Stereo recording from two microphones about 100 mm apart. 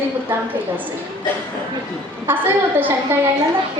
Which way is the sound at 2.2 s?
20° right (ahead or behind).